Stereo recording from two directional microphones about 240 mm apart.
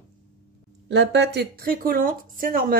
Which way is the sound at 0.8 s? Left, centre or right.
Right.